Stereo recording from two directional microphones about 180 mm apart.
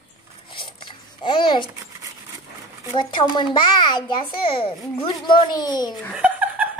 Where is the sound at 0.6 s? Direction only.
25° left (ahead or behind).